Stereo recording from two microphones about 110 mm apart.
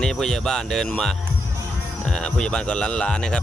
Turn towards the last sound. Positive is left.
turn(degrees=10)  # may be behind; listen again after turning